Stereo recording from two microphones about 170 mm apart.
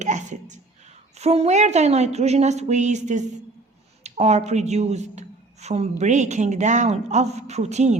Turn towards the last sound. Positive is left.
turn(degrees=-40)  # may be behind; listen again after turning